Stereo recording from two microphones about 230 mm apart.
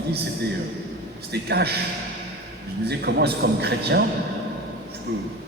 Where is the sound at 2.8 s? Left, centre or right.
Right.